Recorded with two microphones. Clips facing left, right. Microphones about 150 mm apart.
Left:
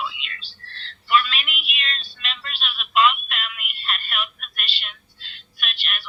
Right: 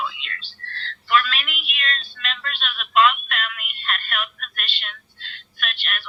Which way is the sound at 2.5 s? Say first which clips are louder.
Right 2 dB; 5° left (ahead or behind).